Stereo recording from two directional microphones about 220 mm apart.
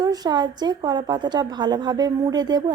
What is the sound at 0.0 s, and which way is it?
A woman's voice, 15° right (ahead or behind).